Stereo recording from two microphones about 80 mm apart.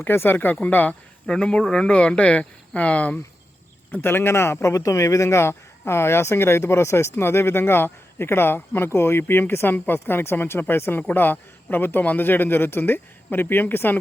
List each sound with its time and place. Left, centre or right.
0.0 s a man's voice: left
3.9 s a man's voice: left